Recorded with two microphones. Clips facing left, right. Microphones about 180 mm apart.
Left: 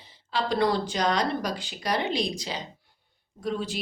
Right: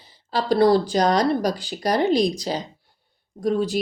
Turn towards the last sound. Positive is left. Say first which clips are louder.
# right 8 dB
turn(degrees=-40)  # may be behind; listen again after turning